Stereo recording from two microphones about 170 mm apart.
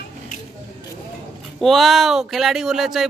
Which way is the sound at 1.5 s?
Centre (ahead or behind).